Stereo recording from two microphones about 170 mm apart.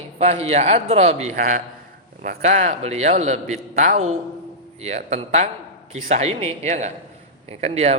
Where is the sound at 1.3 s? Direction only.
50° right (ahead or behind).